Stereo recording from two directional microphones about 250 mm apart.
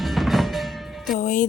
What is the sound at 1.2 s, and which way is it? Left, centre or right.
Music, left.